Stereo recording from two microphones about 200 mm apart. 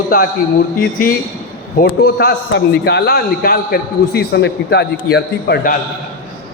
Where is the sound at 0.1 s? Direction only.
45° left (ahead or behind).